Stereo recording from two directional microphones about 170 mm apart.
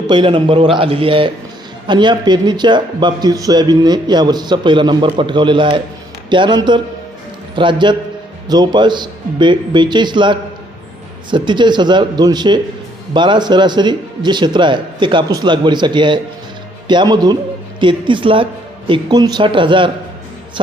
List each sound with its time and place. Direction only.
0.1 s a man's voice: 30° right (ahead or behind)